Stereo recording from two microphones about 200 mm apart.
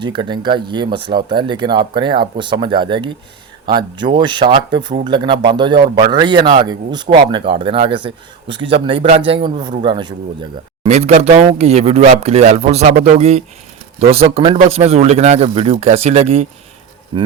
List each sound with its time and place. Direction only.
0.0 s speech: 25° right (ahead or behind)